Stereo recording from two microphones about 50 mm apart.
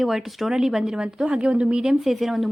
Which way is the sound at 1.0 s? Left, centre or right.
Centre.